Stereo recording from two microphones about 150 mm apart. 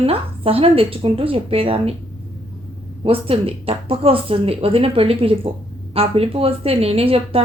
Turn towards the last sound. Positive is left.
turn(degrees=-40)  # may be behind; listen again after turning